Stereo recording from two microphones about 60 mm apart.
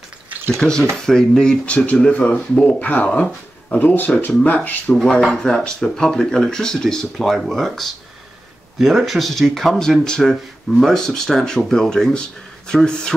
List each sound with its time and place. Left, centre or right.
0.6 s speech: centre; by 4.3 s left
4.9 s speech: centre